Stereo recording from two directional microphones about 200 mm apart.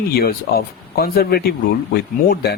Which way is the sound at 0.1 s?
50° left (ahead or behind).